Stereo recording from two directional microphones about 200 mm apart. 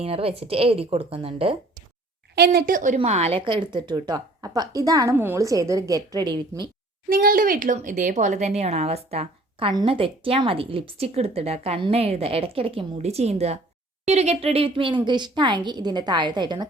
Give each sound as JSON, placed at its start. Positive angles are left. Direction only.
{"t": 0.0, "sound": "speech", "side_deg": -30}
{"t": 2.3, "sound": "speech", "side_deg": -50}
{"t": 7.1, "sound": "speech", "side_deg": -45}